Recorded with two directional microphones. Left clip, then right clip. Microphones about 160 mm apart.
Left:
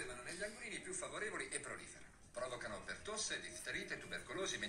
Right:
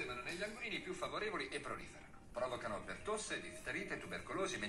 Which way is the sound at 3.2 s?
35° left (ahead or behind).